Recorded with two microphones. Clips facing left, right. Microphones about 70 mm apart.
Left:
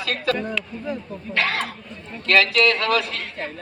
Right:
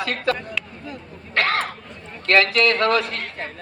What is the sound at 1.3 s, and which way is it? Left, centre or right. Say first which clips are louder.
Speech: right 2 dB; right.